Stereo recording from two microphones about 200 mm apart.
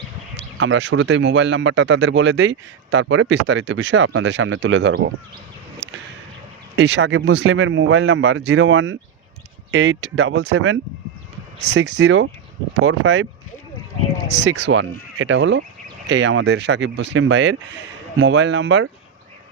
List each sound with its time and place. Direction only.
0.3 s speech: 65° right (ahead or behind)
6.7 s speech: 60° right (ahead or behind)
14.3 s speech: 60° right (ahead or behind)